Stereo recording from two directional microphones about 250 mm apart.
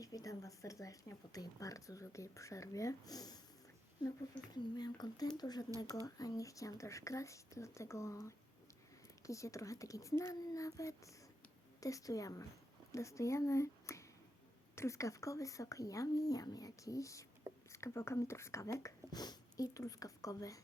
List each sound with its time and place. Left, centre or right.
0.0 s speech: centre
4.5 s speech: centre